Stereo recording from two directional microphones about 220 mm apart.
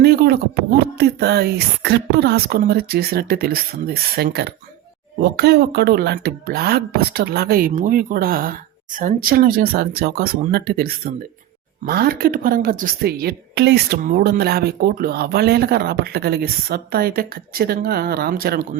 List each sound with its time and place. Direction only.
0.0 s a woman's voice: 45° right (ahead or behind)